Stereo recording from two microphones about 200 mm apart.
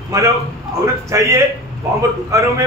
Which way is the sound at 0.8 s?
15° right (ahead or behind).